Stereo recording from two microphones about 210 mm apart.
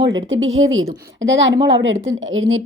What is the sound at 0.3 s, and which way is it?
Speech, 70° right (ahead or behind).